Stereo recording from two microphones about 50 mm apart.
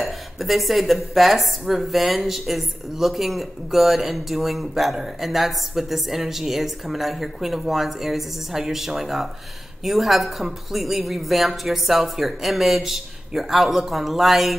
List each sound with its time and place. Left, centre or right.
0.0 s speech: centre